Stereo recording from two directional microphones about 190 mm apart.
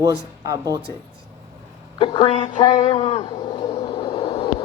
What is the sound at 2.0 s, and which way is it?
Speech, 25° left (ahead or behind).